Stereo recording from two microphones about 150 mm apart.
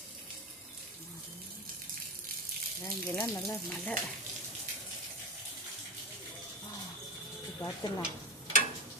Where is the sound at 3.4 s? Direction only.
5° left (ahead or behind).